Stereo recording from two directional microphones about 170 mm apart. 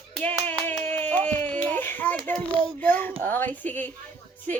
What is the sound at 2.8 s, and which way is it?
Speech, 10° left (ahead or behind).